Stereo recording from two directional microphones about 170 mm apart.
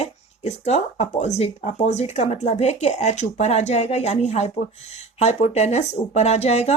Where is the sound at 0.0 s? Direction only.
40° left (ahead or behind).